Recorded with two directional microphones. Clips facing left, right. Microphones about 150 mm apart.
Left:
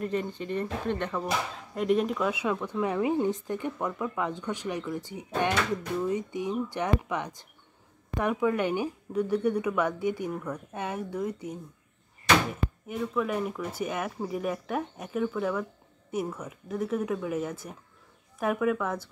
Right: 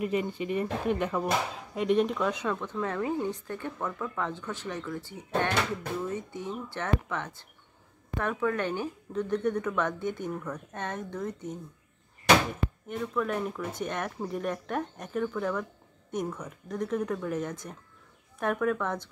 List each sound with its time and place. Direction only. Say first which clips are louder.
0.0 s speech: right 1 dB; 10° right (ahead or behind); by 11.5 s 10° left (ahead or behind)
12.8 s speech: left 1 dB; 5° left (ahead or behind)